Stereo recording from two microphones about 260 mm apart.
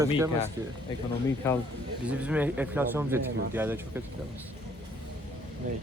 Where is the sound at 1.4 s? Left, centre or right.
Centre.